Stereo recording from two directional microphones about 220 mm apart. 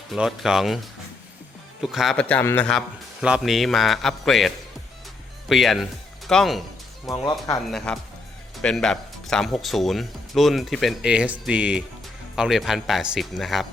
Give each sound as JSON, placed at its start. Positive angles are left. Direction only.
{"t": 0.1, "sound": "speech", "side_deg": 0}
{"t": 1.8, "sound": "speech", "side_deg": 0}
{"t": 7.3, "sound": "speech", "side_deg": 15}
{"t": 7.7, "sound": "speech", "side_deg": 5}